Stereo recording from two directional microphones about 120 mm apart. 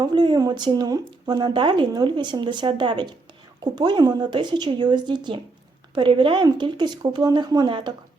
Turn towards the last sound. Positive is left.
turn(degrees=-40)  # may be behind; listen again after turning